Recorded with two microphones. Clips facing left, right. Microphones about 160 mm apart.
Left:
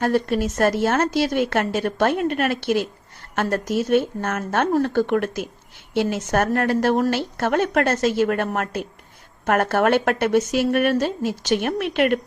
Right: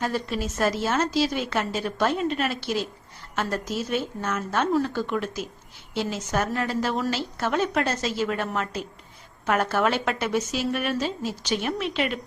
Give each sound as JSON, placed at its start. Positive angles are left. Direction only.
{"t": 0.0, "sound": "a woman's voice", "side_deg": 55}